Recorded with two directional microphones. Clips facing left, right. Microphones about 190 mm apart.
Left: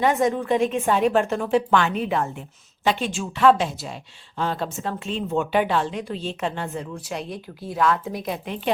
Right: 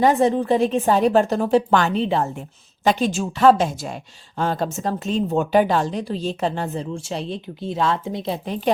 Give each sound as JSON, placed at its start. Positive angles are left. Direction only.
{"t": 0.0, "sound": "a woman's voice", "side_deg": -35}